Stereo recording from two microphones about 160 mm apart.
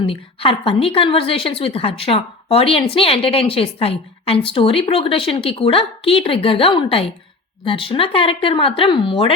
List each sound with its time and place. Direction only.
0.0 s a woman's voice: 35° left (ahead or behind)